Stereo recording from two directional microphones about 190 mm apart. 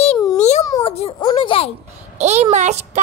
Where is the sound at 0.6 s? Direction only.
20° left (ahead or behind).